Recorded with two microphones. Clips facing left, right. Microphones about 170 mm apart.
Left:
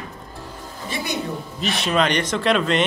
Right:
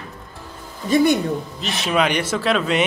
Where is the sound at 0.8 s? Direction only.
45° right (ahead or behind).